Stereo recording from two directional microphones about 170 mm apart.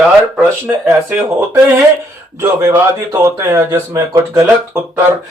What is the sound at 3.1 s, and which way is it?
Speech, 15° right (ahead or behind).